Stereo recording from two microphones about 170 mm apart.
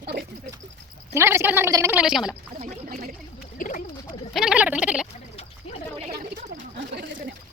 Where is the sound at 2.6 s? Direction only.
50° right (ahead or behind).